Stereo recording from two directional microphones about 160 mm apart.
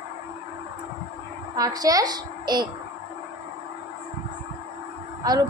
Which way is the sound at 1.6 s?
25° right (ahead or behind).